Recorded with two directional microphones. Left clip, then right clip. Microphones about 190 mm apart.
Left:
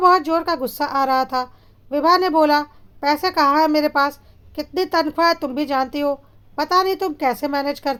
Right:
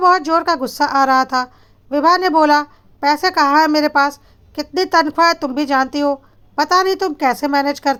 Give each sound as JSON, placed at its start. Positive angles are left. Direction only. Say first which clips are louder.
{"t": 0.0, "sound": "a woman's voice", "louder": "right 2 dB", "side_deg": -15}